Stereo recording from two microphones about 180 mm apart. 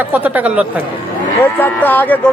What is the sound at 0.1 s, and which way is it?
Speech, 10° right (ahead or behind).